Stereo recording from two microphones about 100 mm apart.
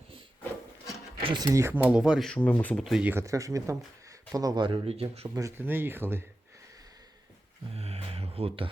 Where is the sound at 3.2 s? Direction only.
35° right (ahead or behind).